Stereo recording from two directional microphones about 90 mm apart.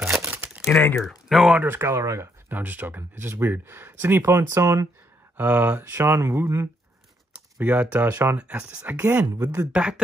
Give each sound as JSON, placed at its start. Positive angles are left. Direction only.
{"t": 0.3, "sound": "computer keyboard", "side_deg": -15}
{"t": 0.9, "sound": "speech", "side_deg": 0}
{"t": 1.5, "sound": "speech", "side_deg": -20}
{"t": 2.5, "sound": "speech", "side_deg": -20}
{"t": 5.4, "sound": "speech", "side_deg": -20}
{"t": 7.5, "sound": "speech", "side_deg": -20}
{"t": 9.4, "sound": "speech", "side_deg": -40}
{"t": 9.7, "sound": "speech", "side_deg": -10}